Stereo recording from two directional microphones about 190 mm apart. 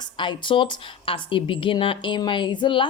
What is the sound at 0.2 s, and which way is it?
Speech, 25° left (ahead or behind).